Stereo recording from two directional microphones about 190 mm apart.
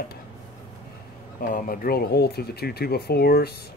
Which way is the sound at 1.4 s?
50° left (ahead or behind).